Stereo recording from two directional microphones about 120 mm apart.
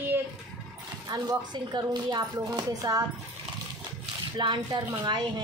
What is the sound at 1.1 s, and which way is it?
A woman's voice, 30° right (ahead or behind).